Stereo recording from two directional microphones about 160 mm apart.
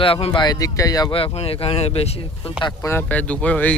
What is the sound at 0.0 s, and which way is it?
Speech, 35° left (ahead or behind).